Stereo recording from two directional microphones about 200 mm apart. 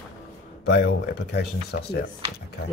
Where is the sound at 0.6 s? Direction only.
55° left (ahead or behind).